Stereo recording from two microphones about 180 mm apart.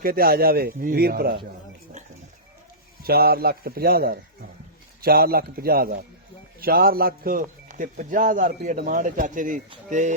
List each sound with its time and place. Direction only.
0.0 s speech: 55° right (ahead or behind)
3.0 s a man's voice: 60° right (ahead or behind)